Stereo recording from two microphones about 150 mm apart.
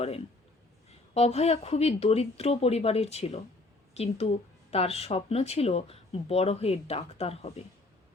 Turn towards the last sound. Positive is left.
turn(degrees=40)  # may be behind; listen again after turning